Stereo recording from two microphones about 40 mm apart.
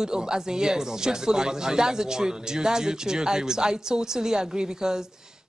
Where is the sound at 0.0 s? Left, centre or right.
Centre.